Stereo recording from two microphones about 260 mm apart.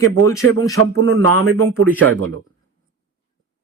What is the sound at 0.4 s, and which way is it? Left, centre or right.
Speech, right.